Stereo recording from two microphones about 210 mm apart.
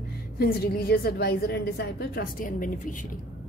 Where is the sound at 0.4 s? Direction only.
45° left (ahead or behind).